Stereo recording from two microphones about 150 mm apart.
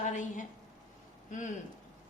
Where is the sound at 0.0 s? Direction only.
55° left (ahead or behind).